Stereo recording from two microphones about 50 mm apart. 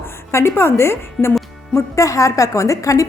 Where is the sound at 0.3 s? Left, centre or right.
Left.